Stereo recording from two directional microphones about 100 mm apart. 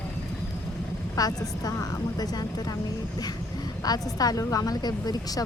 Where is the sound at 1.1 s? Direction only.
40° left (ahead or behind).